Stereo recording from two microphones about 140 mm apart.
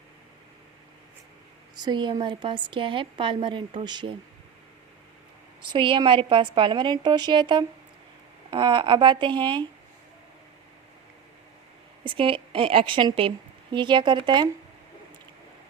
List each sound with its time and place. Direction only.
1.7 s a woman's voice: 30° right (ahead or behind)
5.7 s a woman's voice: 35° right (ahead or behind)
12.0 s a woman's voice: 40° right (ahead or behind)